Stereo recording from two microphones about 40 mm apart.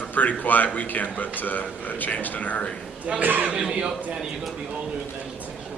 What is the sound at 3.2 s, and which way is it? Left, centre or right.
Speech, right.